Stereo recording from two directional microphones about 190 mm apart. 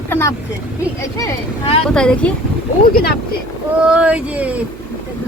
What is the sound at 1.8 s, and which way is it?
Speech, 5° left (ahead or behind).